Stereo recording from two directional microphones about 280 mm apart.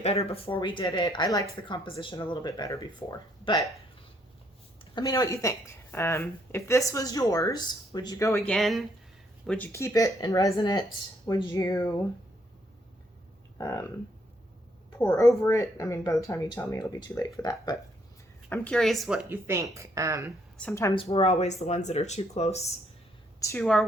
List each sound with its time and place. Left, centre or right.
0.0 s speech: left
4.8 s speech: centre
8.4 s speech: centre
13.6 s speech: centre
15.0 s speech: centre
20.6 s speech: centre
23.4 s speech: centre